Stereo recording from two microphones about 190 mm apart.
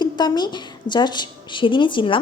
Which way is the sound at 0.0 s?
25° left (ahead or behind).